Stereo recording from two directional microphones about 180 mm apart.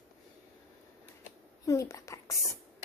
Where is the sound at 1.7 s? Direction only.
15° left (ahead or behind).